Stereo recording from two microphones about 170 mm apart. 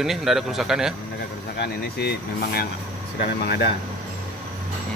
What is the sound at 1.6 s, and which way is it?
Speech, 70° left (ahead or behind).